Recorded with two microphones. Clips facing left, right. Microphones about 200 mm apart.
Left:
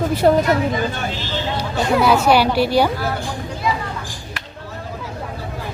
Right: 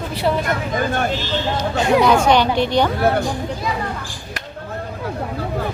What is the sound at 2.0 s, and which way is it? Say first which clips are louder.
Speech: left 3 dB; 5° left (ahead or behind).